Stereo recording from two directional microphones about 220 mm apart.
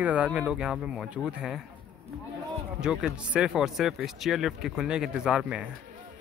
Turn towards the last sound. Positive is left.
turn(degrees=-5)  # may be behind; listen again after turning